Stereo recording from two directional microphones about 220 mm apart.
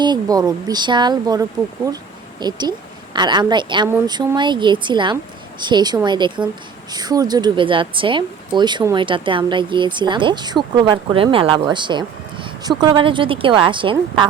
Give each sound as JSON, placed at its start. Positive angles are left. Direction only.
{"t": 0.0, "sound": "a woman's voice", "side_deg": -20}